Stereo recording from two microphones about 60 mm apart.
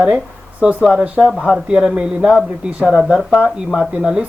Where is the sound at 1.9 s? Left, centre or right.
Centre.